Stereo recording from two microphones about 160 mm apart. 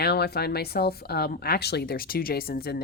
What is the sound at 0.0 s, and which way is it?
Speech, 85° left.